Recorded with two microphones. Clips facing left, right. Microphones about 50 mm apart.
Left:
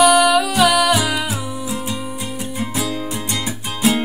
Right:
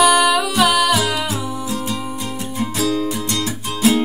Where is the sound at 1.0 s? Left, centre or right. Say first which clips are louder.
Even; centre.